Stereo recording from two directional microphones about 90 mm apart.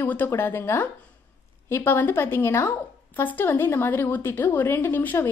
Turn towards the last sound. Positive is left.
turn(degrees=25)  # may be behind; listen again after turning